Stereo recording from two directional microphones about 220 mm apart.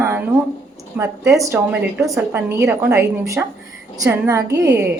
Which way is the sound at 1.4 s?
10° right (ahead or behind).